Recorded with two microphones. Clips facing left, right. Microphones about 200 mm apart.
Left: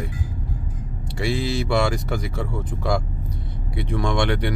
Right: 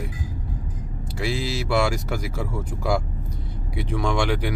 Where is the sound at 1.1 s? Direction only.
5° right (ahead or behind).